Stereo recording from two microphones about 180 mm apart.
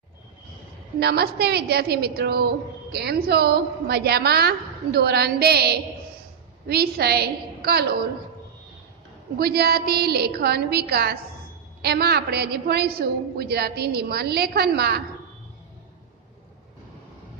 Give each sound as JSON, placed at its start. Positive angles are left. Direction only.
{"t": 0.9, "sound": "a woman's voice", "side_deg": -60}
{"t": 9.4, "sound": "a woman's voice", "side_deg": -60}